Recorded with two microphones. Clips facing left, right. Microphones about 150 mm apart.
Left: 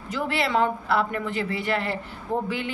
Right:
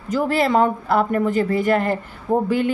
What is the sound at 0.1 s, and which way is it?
Speech, 40° right (ahead or behind).